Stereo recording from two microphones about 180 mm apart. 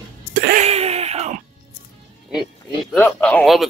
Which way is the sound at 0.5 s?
35° right (ahead or behind).